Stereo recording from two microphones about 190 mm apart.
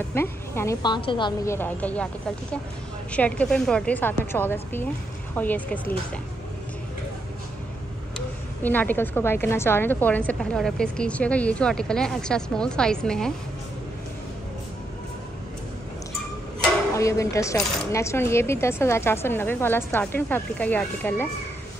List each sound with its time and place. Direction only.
0.1 s a woman's voice: 10° left (ahead or behind)
1.5 s a woman's voice: 10° left (ahead or behind)
3.1 s a woman's voice: 5° left (ahead or behind)
8.6 s a woman's voice: 10° left (ahead or behind)
16.9 s a woman's voice: 15° left (ahead or behind)